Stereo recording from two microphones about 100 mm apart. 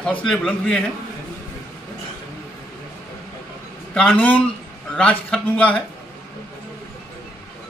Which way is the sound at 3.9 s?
10° left (ahead or behind).